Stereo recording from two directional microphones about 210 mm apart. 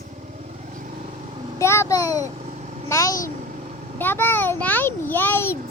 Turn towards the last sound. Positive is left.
turn(degrees=10)  # may be behind; listen again after turning